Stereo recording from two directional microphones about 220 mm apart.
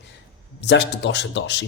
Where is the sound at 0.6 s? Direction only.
50° left (ahead or behind).